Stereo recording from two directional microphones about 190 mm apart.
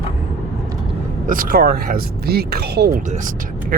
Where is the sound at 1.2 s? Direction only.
45° right (ahead or behind).